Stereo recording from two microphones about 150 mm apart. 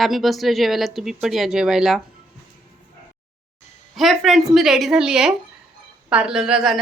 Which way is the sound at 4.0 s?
Centre (ahead or behind).